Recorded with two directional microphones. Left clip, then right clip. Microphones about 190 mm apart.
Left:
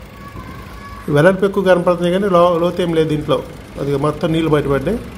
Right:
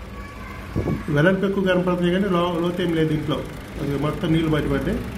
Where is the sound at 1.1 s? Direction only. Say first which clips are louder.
Left 8 dB; 45° left (ahead or behind).